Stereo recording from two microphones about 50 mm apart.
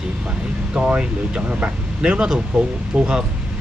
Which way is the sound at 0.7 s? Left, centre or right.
Right.